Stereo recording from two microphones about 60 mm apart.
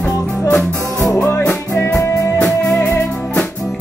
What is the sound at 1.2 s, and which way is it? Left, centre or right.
Music, left.